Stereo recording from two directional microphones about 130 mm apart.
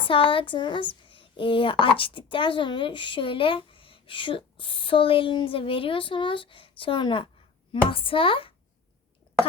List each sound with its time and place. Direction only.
0.0 s speech: 40° left (ahead or behind)
1.0 s a sound: 40° left (ahead or behind)
2.0 s a child's voice: 40° left (ahead or behind)